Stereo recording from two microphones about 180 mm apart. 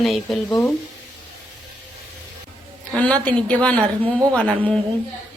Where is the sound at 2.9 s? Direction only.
5° left (ahead or behind).